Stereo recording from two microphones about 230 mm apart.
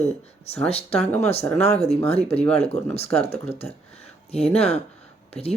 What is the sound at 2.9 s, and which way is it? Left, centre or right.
Speech, left.